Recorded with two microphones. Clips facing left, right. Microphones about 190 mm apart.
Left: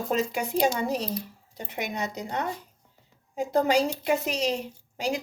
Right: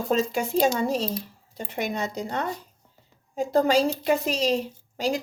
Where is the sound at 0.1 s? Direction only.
15° left (ahead or behind).